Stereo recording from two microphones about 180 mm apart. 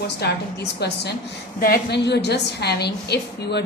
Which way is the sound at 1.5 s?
55° left (ahead or behind).